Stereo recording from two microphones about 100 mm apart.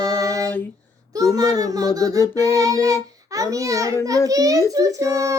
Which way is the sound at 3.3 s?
35° right (ahead or behind).